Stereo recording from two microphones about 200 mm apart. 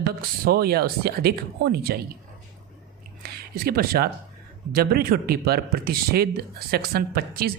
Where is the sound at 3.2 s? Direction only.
50° right (ahead or behind).